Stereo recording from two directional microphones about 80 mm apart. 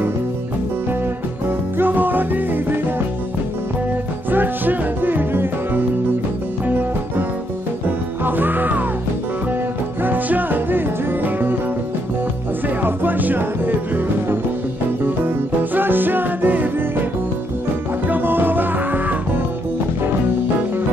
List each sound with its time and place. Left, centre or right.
1.8 s music: right
4.3 s music: right
10.0 s music: right
12.6 s music: right
15.7 s music: right
18.0 s music: right